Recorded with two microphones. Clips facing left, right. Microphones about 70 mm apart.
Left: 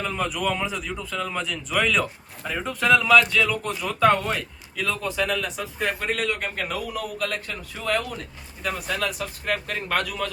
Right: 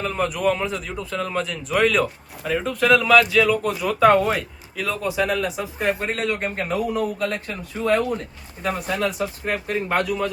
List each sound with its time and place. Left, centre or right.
0.0 s a man's voice: centre; by 10.3 s right